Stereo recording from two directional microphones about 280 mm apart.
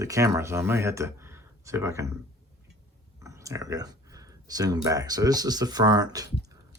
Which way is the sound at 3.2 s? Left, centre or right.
Centre.